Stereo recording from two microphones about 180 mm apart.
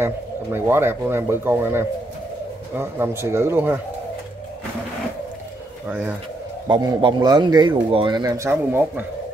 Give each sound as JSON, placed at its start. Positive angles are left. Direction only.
{"t": 0.0, "sound": "speech", "side_deg": -10}
{"t": 6.7, "sound": "a man's voice", "side_deg": -25}